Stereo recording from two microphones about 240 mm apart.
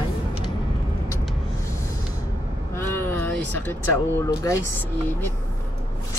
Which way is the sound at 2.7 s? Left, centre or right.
Centre.